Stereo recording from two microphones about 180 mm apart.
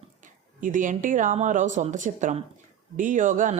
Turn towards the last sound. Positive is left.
turn(degrees=-45)  # may be behind; listen again after turning